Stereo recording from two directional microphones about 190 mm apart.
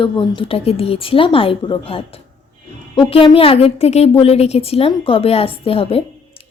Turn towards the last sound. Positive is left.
turn(degrees=30)  # may be behind; listen again after turning